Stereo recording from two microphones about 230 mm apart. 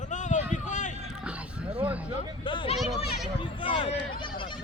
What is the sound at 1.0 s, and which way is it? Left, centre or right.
Music, centre.